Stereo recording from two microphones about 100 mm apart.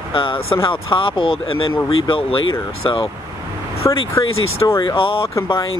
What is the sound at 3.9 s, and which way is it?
Speech, 30° left (ahead or behind).